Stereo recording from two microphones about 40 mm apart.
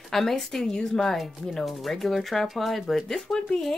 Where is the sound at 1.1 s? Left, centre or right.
Centre.